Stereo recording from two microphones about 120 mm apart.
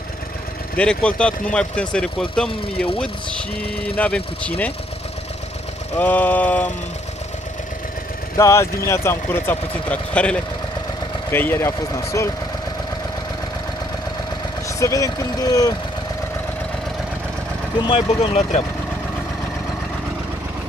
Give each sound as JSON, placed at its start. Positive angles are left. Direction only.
{"t": 0.7, "sound": "speech", "side_deg": 10}
{"t": 5.9, "sound": "speech", "side_deg": 15}
{"t": 8.4, "sound": "speech", "side_deg": 25}
{"t": 14.8, "sound": "speech", "side_deg": 25}
{"t": 17.8, "sound": "speech", "side_deg": 50}